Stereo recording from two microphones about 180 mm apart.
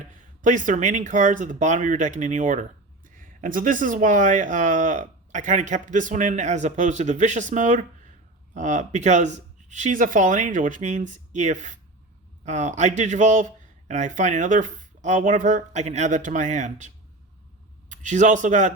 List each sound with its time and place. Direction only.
0.4 s speech: 45° right (ahead or behind)